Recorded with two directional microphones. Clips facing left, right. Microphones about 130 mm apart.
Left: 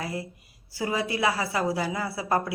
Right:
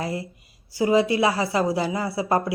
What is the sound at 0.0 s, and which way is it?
A woman's voice, 25° right (ahead or behind).